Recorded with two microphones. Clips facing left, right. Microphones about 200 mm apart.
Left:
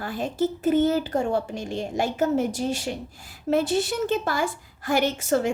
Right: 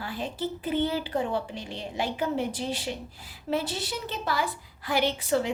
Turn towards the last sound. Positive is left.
turn(degrees=45)  # may be behind; listen again after turning